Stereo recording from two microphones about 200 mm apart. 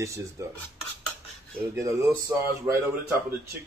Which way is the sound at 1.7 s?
15° right (ahead or behind).